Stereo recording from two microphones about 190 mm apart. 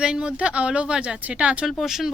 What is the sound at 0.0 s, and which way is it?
Speech, 5° right (ahead or behind).